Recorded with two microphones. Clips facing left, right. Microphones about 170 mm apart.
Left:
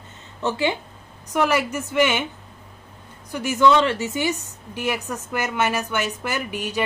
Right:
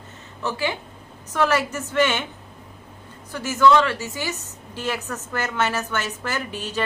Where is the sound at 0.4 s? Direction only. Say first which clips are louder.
Left 3 dB; 20° left (ahead or behind).